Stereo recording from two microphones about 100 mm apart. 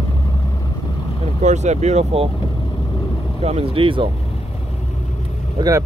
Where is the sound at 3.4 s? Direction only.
90° right; by 4.1 s 60° right (ahead or behind).